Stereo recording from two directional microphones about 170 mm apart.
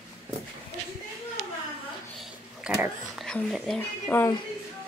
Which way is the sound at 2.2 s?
Centre (ahead or behind).